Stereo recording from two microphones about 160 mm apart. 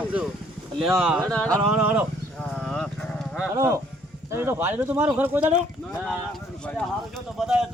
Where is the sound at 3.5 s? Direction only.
20° right (ahead or behind).